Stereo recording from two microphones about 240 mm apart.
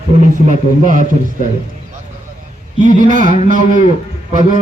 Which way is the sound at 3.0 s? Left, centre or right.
Right.